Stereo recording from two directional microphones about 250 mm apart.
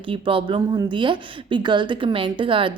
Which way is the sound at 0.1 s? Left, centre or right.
Right.